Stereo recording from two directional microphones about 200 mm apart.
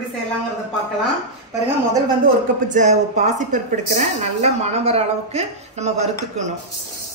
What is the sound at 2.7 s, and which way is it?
A woman's voice, 35° right (ahead or behind).